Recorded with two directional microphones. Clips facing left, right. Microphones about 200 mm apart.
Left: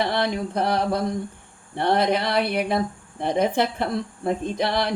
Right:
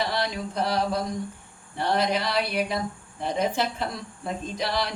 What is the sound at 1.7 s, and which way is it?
A woman's voice, 55° left (ahead or behind).